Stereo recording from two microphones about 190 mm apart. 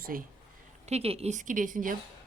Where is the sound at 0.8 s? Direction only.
35° right (ahead or behind).